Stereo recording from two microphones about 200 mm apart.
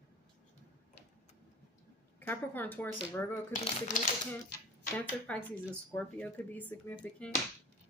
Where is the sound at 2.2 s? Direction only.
10° left (ahead or behind).